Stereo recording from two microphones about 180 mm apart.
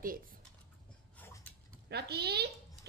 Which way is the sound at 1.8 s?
65° right (ahead or behind).